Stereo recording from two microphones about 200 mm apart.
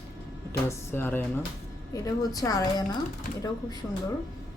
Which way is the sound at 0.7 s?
10° left (ahead or behind).